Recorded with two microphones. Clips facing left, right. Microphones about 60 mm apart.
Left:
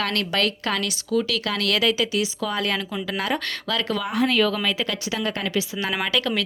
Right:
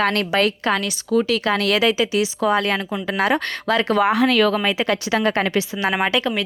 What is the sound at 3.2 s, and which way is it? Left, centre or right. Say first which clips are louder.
Speech: right 9 dB; right.